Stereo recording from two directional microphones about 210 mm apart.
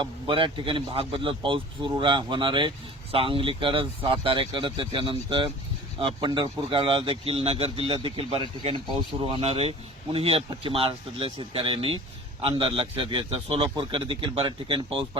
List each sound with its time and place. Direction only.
0.0 s speech: 25° right (ahead or behind)